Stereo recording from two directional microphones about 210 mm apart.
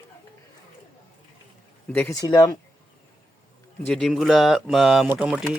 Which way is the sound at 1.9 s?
10° left (ahead or behind).